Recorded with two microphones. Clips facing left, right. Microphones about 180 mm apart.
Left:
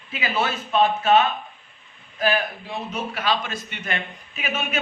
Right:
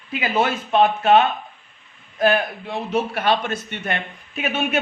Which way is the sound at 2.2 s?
60° right (ahead or behind).